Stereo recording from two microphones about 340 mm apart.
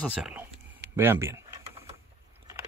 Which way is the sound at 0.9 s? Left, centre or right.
Centre.